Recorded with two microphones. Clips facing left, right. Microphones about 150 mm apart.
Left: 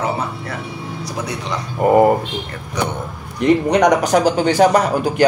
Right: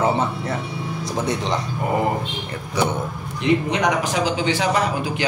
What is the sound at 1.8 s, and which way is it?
Speech, 55° left (ahead or behind).